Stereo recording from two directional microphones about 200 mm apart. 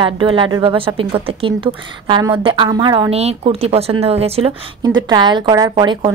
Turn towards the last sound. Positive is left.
turn(degrees=-25)  # may be behind; listen again after turning